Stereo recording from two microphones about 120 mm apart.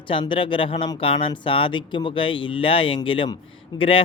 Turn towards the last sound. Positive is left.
turn(degrees=40)  # may be behind; listen again after turning